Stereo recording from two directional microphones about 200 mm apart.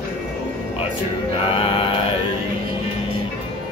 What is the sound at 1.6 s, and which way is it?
Chant, 25° left (ahead or behind).